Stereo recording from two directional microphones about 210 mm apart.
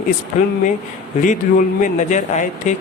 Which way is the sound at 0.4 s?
35° left (ahead or behind).